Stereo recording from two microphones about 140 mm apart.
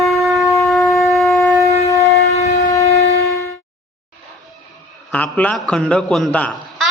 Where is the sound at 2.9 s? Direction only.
50° left (ahead or behind).